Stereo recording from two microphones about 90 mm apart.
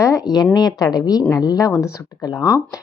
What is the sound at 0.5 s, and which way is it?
A woman's voice, 50° left (ahead or behind).